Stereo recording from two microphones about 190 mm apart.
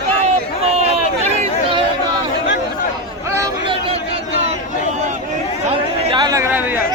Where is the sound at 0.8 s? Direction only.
35° right (ahead or behind).